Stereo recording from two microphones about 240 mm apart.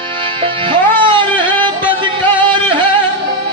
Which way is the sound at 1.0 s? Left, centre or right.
Centre.